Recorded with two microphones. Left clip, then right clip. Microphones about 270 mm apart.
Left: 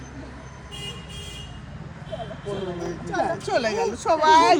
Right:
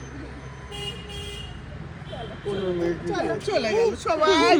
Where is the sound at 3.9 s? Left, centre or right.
Left.